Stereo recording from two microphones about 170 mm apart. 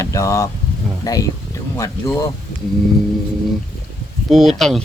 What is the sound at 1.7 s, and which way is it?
Speech, 20° left (ahead or behind).